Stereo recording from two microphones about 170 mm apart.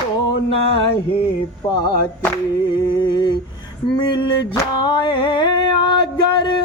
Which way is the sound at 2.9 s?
25° left (ahead or behind).